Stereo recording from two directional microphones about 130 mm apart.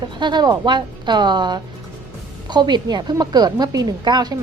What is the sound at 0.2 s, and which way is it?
A woman's voice, 35° right (ahead or behind).